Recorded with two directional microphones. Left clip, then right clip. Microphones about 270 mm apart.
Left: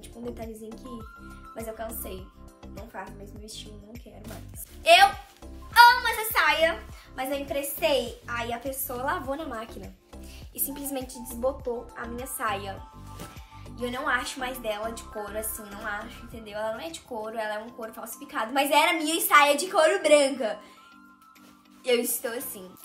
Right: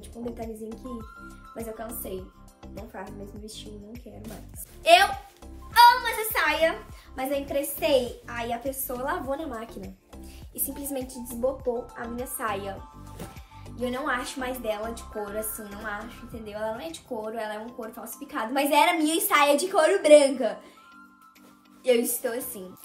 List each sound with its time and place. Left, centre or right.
1.5 s speech: centre
3.1 s a woman's voice: centre
12.4 s speech: centre
21.8 s speech: centre